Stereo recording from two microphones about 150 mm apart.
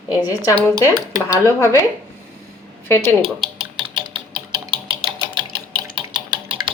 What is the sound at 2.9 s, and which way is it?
Speech, 15° left (ahead or behind).